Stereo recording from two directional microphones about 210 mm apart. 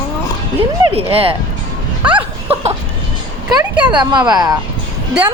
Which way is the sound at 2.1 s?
25° right (ahead or behind).